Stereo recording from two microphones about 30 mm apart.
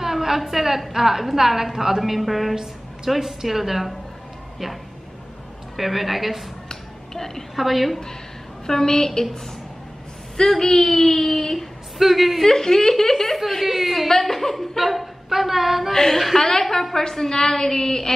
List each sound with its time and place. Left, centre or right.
0.0 s a woman's voice: centre
5.8 s a woman's voice: centre
6.7 s a sound: centre
7.5 s a woman's voice: centre
8.6 s a woman's voice: centre
10.5 s speech: centre
12.0 s a woman's voice: centre
12.4 s speech: centre
13.7 s a woman's voice: centre
14.0 s speech: centre
14.8 s a sound: centre
15.2 s a woman's voice: centre
15.9 s a woman's voice: centre